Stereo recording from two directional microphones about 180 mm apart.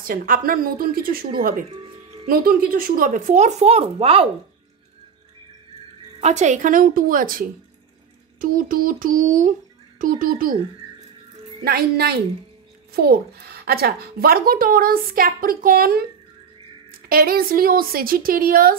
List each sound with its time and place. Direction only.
0.0 s speech: 50° right (ahead or behind); by 4.3 s 30° right (ahead or behind)
6.2 s speech: 40° right (ahead or behind)
11.6 s a woman's voice: 60° right (ahead or behind)
17.1 s a woman's voice: 55° right (ahead or behind)